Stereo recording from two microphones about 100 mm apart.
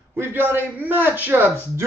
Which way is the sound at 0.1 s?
25° right (ahead or behind).